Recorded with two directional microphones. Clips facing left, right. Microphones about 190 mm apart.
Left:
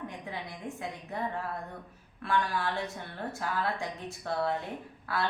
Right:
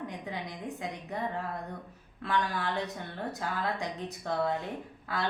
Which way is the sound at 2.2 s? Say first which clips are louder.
Left 1 dB; 20° right (ahead or behind).